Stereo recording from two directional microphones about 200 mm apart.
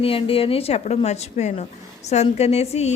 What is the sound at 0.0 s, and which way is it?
Speech, 30° left (ahead or behind).